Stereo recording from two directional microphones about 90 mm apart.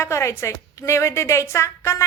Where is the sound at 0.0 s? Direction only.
30° left (ahead or behind).